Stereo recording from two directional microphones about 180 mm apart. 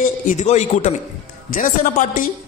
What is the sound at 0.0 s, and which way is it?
A man's voice, 45° left (ahead or behind).